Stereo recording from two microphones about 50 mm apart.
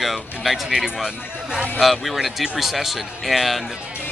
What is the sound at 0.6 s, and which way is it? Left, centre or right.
Speech, centre.